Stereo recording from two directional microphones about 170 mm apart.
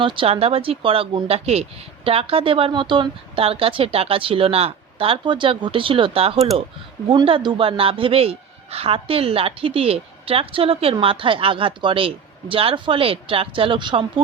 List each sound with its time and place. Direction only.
0.0 s speech: 30° right (ahead or behind)